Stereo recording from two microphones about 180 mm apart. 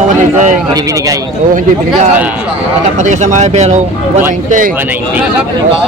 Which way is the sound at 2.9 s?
40° right (ahead or behind).